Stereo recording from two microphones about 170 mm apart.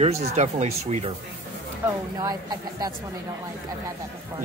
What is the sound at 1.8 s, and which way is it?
Speech, 20° right (ahead or behind).